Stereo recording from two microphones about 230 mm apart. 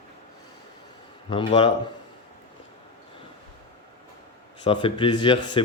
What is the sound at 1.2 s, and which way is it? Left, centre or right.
Speech, left.